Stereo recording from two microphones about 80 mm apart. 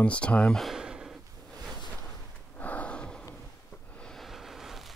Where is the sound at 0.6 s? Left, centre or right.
Centre.